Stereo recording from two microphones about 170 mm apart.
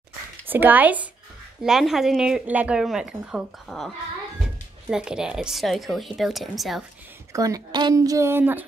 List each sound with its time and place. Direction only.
0.5 s a woman's voice: 10° right (ahead or behind)
7.3 s a woman's voice: 20° right (ahead or behind)